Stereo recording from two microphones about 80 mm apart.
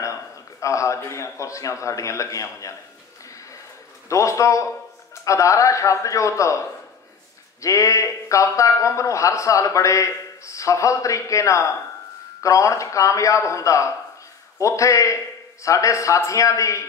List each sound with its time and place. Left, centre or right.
0.0 s a man's voice: left
4.1 s speech: left
7.6 s speech: left